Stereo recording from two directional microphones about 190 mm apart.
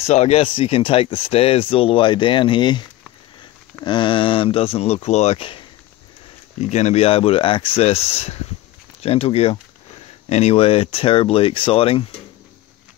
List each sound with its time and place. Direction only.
0.0 s speech: 35° left (ahead or behind)
3.8 s speech: 25° left (ahead or behind)
6.6 s speech: 35° left (ahead or behind)